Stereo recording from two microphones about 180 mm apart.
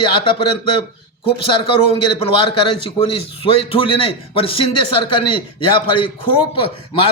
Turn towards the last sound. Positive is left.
turn(degrees=30)  # may be behind; listen again after turning